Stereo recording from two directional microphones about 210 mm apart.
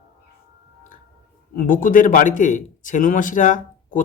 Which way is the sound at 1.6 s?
40° left (ahead or behind).